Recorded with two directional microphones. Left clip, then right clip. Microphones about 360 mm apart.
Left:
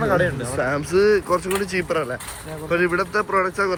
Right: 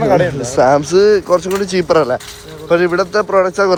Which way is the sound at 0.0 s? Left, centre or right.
Centre.